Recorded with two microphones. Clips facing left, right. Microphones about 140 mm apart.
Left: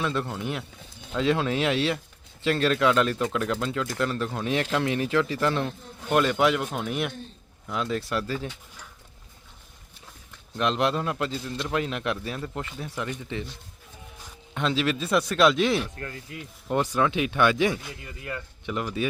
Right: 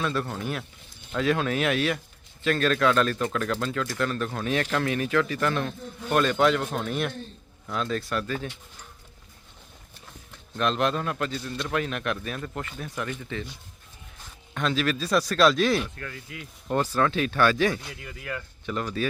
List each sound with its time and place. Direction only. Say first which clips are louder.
0.0 s speech: even; 20° left (ahead or behind)
10.6 s speech: even; 20° left (ahead or behind)
14.5 s speech: left 1 dB; 20° left (ahead or behind)
16.0 s speech: left 2 dB; 35° left (ahead or behind)
16.8 s speech: even; 15° left (ahead or behind)
17.8 s speech: even; 5° left (ahead or behind)
18.6 s speech: even; 15° left (ahead or behind)